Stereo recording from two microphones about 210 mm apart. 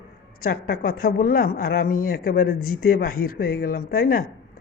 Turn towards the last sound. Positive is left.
turn(degrees=45)  # may be behind; listen again after turning